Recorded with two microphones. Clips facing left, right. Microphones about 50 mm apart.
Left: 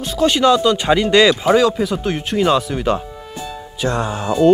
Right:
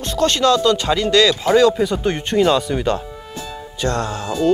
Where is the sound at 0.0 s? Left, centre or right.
Centre.